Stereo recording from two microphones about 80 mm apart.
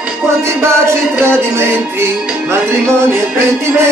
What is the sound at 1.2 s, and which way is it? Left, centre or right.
Music, right.